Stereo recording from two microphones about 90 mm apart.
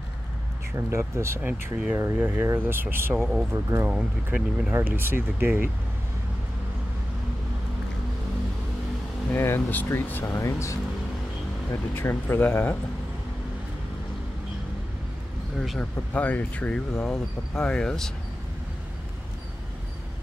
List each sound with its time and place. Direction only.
0.7 s speech: 30° right (ahead or behind)
1.4 s speech: 15° right (ahead or behind)
2.0 s speech: 25° right (ahead or behind)
3.9 s speech: 15° right (ahead or behind)
4.7 s speech: 25° right (ahead or behind)
9.3 s speech: 25° left (ahead or behind)
15.8 s speech: 15° left (ahead or behind)